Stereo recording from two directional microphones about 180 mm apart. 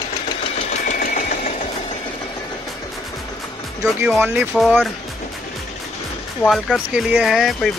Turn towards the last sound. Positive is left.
turn(degrees=0)  # may be behind; listen again after turning